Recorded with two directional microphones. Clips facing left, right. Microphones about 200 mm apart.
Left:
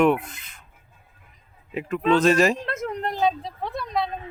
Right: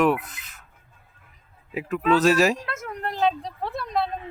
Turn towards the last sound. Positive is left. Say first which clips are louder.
# even
turn(degrees=0)  # may be behind; listen again after turning